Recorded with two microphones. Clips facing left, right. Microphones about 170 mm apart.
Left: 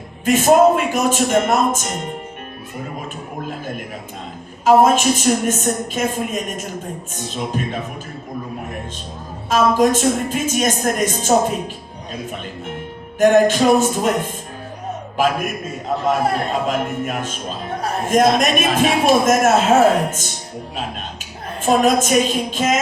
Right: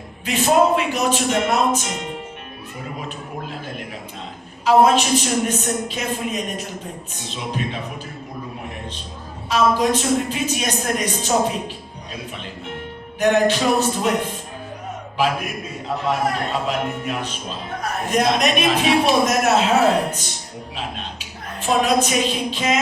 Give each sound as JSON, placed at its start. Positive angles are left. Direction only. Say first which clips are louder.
{"t": 0.3, "sound": "a man's voice", "louder": "left 5 dB", "side_deg": 45}
{"t": 4.6, "sound": "a man's voice", "louder": "left 2 dB", "side_deg": 50}
{"t": 9.5, "sound": "a man's voice", "louder": "left 3 dB", "side_deg": 45}
{"t": 13.1, "sound": "a man's voice", "louder": "left 4 dB", "side_deg": 45}
{"t": 21.6, "sound": "a man's voice", "louder": "left 3 dB", "side_deg": 45}